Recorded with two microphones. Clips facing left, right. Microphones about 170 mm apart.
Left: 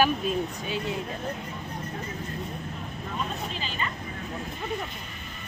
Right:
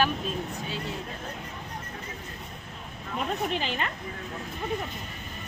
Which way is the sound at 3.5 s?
80° right.